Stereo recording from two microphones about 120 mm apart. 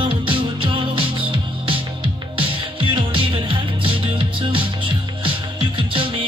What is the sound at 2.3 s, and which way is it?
Music, 45° right (ahead or behind).